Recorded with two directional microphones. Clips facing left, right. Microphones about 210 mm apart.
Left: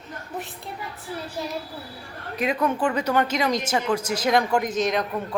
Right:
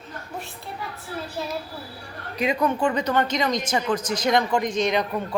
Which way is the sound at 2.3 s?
5° left (ahead or behind).